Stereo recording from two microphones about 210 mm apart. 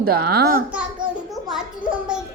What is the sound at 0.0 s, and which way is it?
Speech, 50° right (ahead or behind).